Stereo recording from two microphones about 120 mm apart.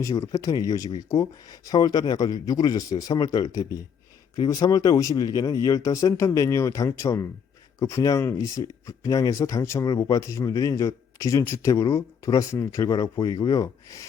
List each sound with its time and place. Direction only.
0.0 s speech: 25° left (ahead or behind)